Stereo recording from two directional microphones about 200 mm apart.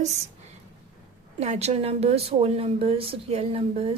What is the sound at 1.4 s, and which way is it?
A woman's voice, 35° right (ahead or behind).